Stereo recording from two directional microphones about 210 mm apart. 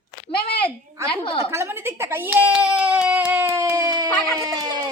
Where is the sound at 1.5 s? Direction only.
10° right (ahead or behind).